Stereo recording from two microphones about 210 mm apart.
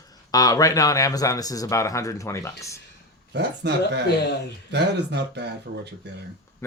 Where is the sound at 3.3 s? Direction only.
55° right (ahead or behind).